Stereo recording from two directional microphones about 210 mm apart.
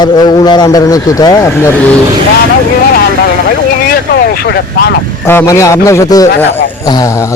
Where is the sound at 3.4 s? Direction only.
45° left (ahead or behind).